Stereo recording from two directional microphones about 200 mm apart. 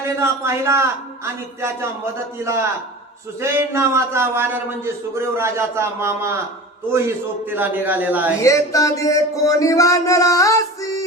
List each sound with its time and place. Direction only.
0.0 s a man's voice: 15° right (ahead or behind)
7.5 s a man's voice: 10° right (ahead or behind)
8.4 s music: 15° left (ahead or behind)